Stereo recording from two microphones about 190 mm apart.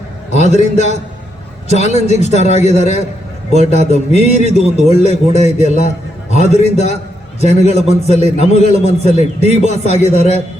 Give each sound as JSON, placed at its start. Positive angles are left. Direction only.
{"t": 0.5, "sound": "a man's voice", "side_deg": 40}
{"t": 4.5, "sound": "a man's voice", "side_deg": -35}
{"t": 4.9, "sound": "a man's voice", "side_deg": 35}